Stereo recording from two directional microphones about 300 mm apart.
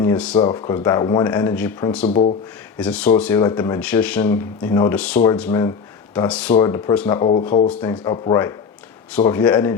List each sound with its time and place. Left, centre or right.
0.0 s speech: centre
2.0 s speech: left
2.7 s speech: centre
7.2 s speech: centre
7.7 s speech: centre